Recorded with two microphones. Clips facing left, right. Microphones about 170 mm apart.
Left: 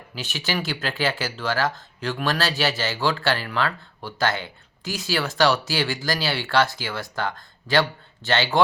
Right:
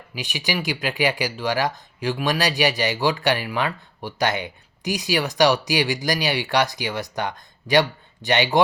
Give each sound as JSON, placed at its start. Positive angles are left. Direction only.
{"t": 0.1, "sound": "speech", "side_deg": -15}